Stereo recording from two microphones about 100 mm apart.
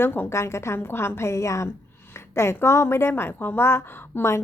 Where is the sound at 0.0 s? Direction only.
20° left (ahead or behind).